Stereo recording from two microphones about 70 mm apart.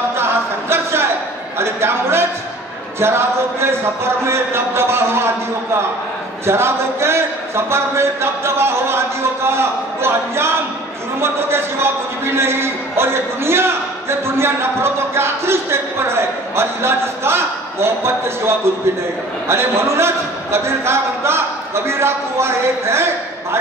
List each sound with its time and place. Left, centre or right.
0.2 s a sound: right
1.6 s a man's voice: right
6.4 s a man's voice: right